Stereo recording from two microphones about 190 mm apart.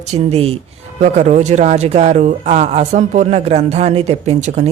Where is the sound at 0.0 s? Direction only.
35° right (ahead or behind).